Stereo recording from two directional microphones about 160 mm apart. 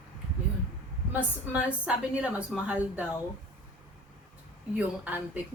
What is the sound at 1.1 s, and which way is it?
Speech, 10° right (ahead or behind).